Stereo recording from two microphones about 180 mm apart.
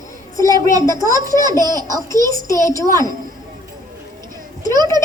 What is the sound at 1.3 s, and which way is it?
Speech, 15° left (ahead or behind).